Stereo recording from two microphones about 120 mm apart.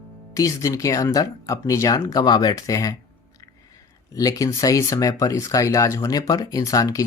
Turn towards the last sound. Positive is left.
turn(degrees=30)  # may be behind; listen again after turning